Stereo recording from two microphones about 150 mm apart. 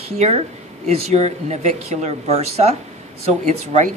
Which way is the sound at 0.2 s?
45° right (ahead or behind).